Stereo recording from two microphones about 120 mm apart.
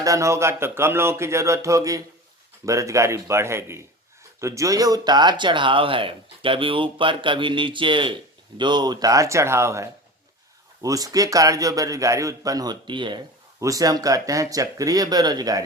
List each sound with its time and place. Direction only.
0.0 s a man's voice: 25° right (ahead or behind)
13.6 s a man's voice: 30° right (ahead or behind)